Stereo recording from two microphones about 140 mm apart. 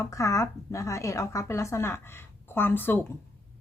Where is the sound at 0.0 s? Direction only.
20° left (ahead or behind).